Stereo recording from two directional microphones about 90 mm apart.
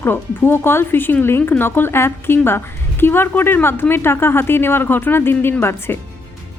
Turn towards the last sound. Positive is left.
turn(degrees=25)  # may be behind; listen again after turning